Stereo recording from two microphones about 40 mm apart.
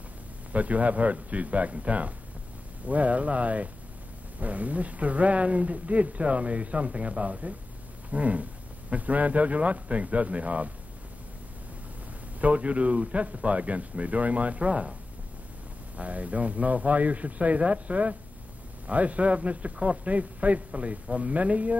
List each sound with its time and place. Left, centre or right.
0.5 s speech: right
12.4 s speech: right
16.0 s speech: right